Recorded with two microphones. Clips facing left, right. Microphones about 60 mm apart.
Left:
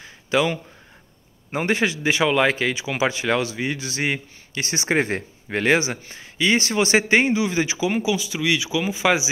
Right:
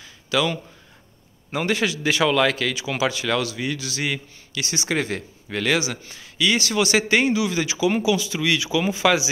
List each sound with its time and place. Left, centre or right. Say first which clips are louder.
0.0 s a sound: left 2 dB; left
1.5 s a man's voice: left 1 dB; left
8.0 s speech: right 1 dB; centre